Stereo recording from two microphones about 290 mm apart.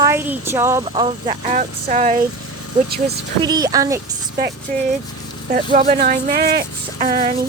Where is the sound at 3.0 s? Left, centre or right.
Centre.